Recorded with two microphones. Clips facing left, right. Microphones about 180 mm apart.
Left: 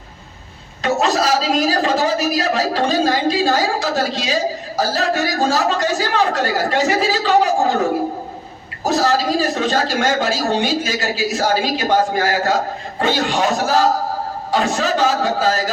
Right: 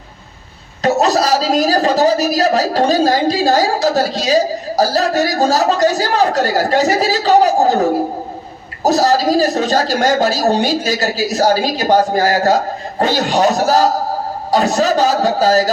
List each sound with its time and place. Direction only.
0.8 s a woman's voice: 40° right (ahead or behind)